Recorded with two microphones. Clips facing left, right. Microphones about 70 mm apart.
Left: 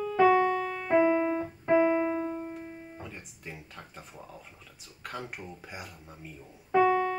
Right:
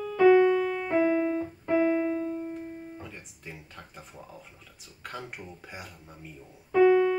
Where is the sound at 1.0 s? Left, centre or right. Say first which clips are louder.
Right 1 dB; left.